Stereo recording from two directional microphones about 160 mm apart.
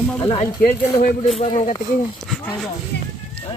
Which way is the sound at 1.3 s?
35° left (ahead or behind).